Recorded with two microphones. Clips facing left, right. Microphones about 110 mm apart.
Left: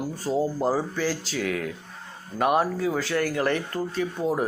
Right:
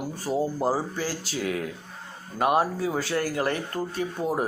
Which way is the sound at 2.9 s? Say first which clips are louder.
Left 1 dB; 40° right (ahead or behind).